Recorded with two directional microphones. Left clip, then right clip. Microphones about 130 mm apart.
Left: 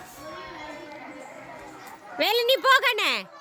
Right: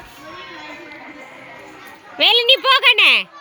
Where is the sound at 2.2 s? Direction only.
10° left (ahead or behind).